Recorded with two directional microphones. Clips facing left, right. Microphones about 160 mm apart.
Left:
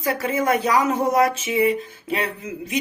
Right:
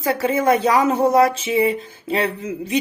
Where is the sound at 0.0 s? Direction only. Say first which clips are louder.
Right 4 dB; 25° right (ahead or behind).